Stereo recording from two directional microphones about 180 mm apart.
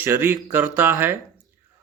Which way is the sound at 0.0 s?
10° right (ahead or behind).